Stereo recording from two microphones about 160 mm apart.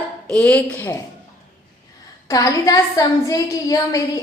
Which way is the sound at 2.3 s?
20° left (ahead or behind).